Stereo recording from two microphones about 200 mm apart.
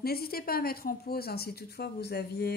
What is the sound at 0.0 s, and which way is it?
A woman's voice, 50° left (ahead or behind).